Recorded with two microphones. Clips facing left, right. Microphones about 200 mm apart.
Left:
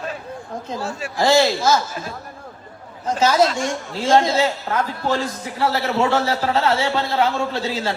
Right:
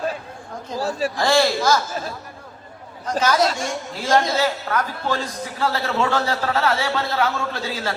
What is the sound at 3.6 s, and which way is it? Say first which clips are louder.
A man's voice: left 3 dB; 25° left (ahead or behind).